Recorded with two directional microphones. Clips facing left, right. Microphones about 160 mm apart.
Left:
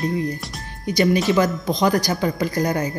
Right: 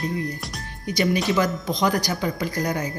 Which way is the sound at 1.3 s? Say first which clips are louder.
Left 3 dB; 35° left (ahead or behind).